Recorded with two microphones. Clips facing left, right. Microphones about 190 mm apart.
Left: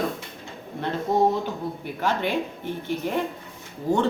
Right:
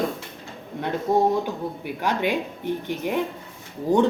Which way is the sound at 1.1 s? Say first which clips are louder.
Right 1 dB; 10° right (ahead or behind).